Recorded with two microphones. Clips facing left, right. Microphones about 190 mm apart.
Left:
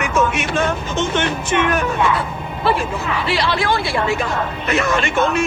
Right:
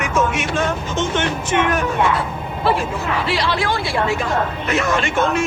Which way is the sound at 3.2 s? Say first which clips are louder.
Left 3 dB; 65° left (ahead or behind).